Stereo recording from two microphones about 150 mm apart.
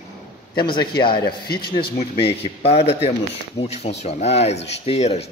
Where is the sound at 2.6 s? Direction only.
45° left (ahead or behind).